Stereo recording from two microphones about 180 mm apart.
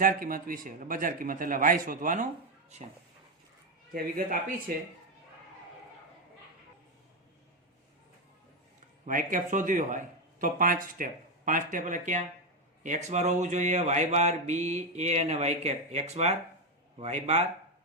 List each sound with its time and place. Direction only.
0.0 s a man's voice: 50° right (ahead or behind)
3.9 s a man's voice: 50° right (ahead or behind)
9.0 s a man's voice: 45° right (ahead or behind)